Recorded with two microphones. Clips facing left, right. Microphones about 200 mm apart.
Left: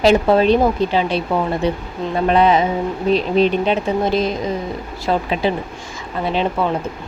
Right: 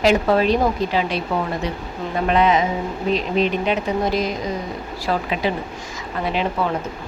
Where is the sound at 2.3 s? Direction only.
35° left (ahead or behind).